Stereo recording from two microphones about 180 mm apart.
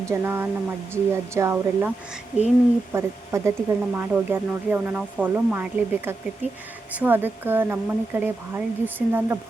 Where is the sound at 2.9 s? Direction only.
15° right (ahead or behind).